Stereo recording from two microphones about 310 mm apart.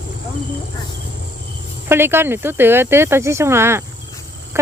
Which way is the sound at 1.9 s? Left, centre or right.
Centre.